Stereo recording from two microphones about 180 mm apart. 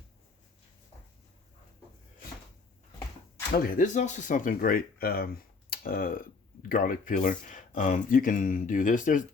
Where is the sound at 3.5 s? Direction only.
45° left (ahead or behind).